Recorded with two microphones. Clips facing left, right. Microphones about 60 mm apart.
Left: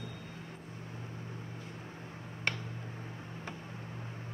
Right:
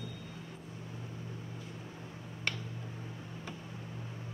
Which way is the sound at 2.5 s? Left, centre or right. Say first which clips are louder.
Left 2 dB; left.